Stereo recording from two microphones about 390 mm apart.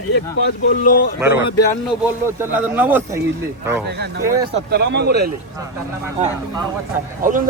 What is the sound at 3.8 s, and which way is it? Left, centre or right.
A man's voice, right.